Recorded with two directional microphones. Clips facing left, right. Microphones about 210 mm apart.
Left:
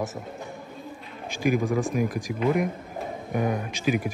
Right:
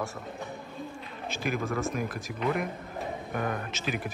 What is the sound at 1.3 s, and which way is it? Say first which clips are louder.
Speech: left 7 dB; 15° left (ahead or behind).